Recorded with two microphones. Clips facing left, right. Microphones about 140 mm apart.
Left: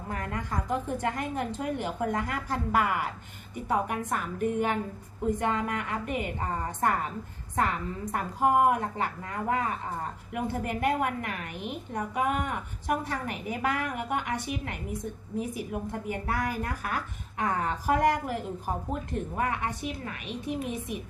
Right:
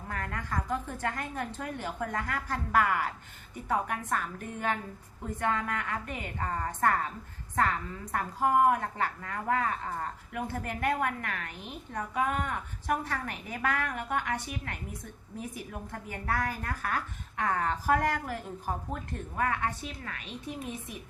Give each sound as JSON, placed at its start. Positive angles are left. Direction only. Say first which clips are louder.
{"t": 0.1, "sound": "a woman's voice", "louder": "left 2 dB", "side_deg": 15}